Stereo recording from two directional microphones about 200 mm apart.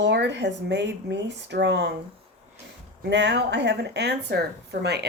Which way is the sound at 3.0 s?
60° right (ahead or behind).